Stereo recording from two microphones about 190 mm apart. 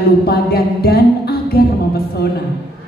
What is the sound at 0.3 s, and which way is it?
Speech, 55° left (ahead or behind).